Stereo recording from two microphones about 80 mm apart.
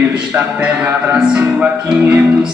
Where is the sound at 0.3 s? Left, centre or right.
Centre.